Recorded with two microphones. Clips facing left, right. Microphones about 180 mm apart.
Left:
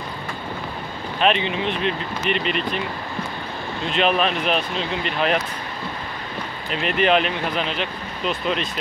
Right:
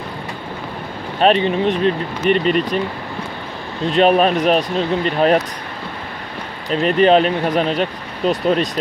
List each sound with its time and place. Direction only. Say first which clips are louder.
1.2 s speech: right 6 dB; 40° right (ahead or behind)
3.8 s speech: right 7 dB; 40° right (ahead or behind)
6.7 s speech: right 7 dB; 40° right (ahead or behind)